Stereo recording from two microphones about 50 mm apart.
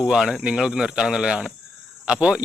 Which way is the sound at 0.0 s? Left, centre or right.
Centre.